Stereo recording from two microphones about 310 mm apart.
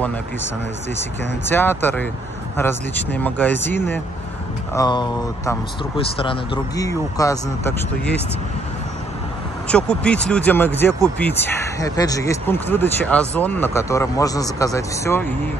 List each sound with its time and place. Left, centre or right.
1.5 s speech: centre
9.7 s speech: centre